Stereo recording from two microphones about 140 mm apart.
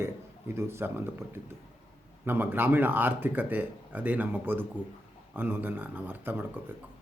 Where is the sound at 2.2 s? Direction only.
15° right (ahead or behind).